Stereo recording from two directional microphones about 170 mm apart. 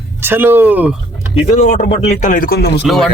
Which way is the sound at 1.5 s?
45° left (ahead or behind).